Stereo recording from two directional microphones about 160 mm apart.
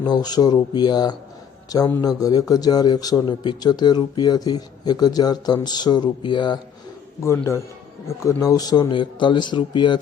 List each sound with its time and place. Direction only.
0.0 s a man's voice: 25° left (ahead or behind)
7.2 s a man's voice: 15° left (ahead or behind)